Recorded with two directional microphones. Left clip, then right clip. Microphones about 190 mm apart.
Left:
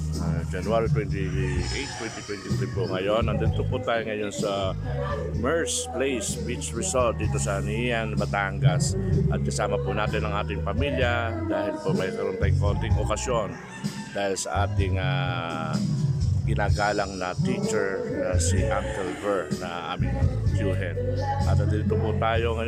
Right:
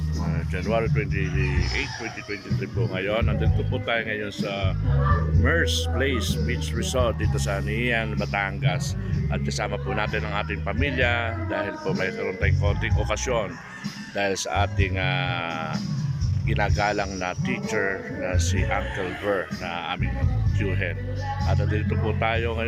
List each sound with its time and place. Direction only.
0.3 s speech: centre (ahead or behind)
2.8 s speech: 5° left (ahead or behind)
4.4 s speech: 15° left (ahead or behind); by 19.5 s centre (ahead or behind)
21.5 s speech: 5° left (ahead or behind)